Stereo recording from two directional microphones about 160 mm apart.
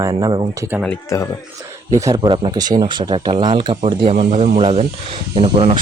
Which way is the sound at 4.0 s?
40° right (ahead or behind).